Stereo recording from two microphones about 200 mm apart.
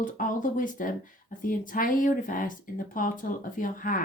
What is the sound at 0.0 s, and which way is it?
Speech, 40° left (ahead or behind).